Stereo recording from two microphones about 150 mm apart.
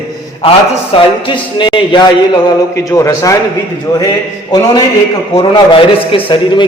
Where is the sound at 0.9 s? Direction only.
40° left (ahead or behind); by 3.3 s 20° left (ahead or behind).